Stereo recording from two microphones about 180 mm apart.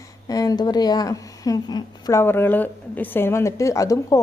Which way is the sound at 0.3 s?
20° left (ahead or behind).